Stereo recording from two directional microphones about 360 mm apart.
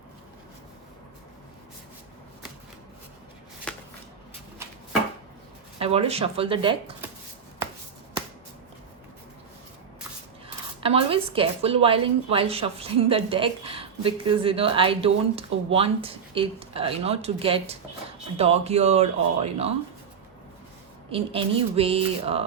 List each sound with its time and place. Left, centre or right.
5.8 s a woman's voice: centre
10.8 s a woman's voice: centre
21.1 s a woman's voice: centre